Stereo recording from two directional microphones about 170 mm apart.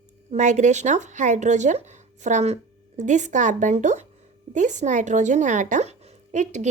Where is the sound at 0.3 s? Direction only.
45° right (ahead or behind).